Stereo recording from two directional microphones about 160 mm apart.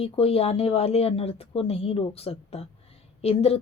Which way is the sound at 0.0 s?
40° left (ahead or behind).